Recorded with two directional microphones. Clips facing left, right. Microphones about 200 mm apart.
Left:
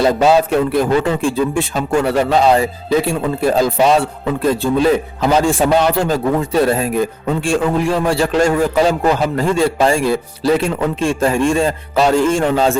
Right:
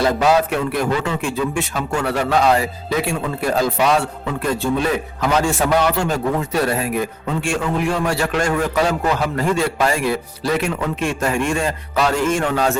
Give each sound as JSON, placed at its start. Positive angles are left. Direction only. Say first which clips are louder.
{"t": 0.0, "sound": "a man's voice", "louder": "left 4 dB", "side_deg": 25}